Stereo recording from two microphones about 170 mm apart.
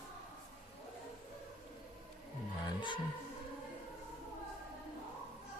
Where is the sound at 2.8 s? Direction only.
30° left (ahead or behind).